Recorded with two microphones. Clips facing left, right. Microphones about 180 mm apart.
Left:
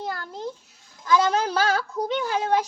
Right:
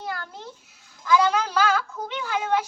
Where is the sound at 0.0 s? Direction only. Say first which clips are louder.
Left 3 dB; 40° left (ahead or behind).